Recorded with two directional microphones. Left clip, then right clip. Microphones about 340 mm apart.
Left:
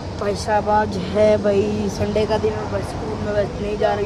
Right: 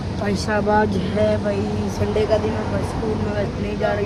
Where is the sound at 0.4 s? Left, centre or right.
Left.